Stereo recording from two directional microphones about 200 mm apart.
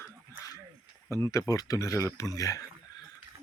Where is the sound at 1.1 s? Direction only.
15° left (ahead or behind).